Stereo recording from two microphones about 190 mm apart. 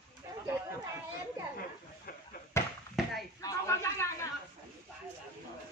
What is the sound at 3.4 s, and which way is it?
Speech, 15° left (ahead or behind).